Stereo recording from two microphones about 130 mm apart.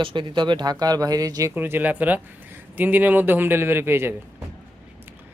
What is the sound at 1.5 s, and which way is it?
A man's voice, 15° right (ahead or behind).